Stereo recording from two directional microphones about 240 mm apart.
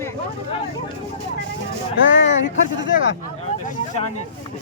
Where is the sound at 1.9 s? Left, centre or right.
Left.